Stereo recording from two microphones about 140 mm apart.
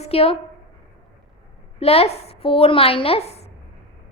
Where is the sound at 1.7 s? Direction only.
45° left (ahead or behind).